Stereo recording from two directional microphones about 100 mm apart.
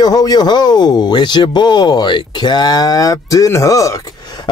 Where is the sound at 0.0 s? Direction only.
40° left (ahead or behind).